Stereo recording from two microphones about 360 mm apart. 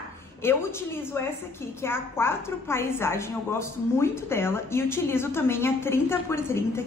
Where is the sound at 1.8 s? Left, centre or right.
Centre.